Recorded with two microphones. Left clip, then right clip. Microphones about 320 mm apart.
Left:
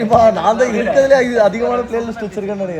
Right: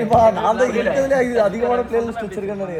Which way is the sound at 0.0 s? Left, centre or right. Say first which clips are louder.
Left 3 dB; left.